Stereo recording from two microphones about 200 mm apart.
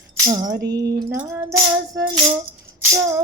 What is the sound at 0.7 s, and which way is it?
Music, 20° right (ahead or behind).